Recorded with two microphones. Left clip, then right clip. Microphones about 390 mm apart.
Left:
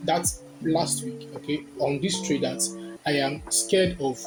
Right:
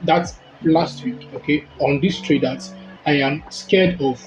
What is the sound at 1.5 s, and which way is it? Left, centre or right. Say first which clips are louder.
A woman's voice: right 8 dB; left.